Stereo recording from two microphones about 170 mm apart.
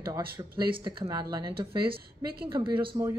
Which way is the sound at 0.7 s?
30° right (ahead or behind).